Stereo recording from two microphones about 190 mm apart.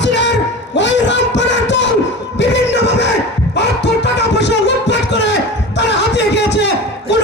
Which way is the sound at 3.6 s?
65° left (ahead or behind).